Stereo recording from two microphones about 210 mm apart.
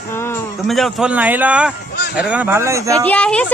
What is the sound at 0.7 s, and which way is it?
Speech, centre (ahead or behind).